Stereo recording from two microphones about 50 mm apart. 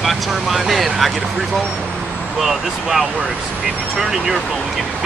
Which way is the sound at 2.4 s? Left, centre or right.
Centre.